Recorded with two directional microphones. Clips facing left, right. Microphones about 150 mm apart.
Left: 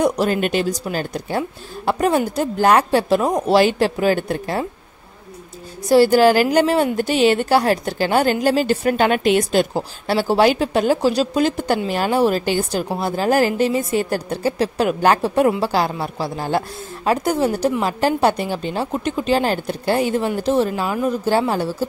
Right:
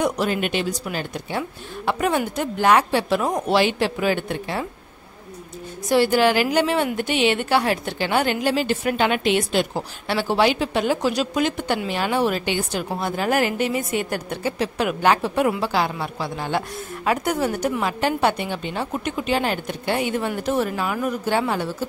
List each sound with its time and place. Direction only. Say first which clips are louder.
0.0 s a woman's voice: left 4 dB; 40° left (ahead or behind)
5.9 s a woman's voice: left 5 dB; 40° left (ahead or behind)